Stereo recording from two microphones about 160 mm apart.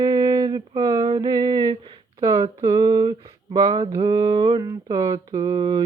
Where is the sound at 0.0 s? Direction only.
30° right (ahead or behind).